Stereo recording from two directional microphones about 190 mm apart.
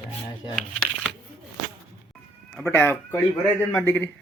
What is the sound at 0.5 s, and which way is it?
Crumpling, centre (ahead or behind).